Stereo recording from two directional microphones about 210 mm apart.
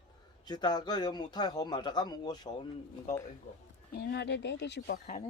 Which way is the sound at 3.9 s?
50° left (ahead or behind).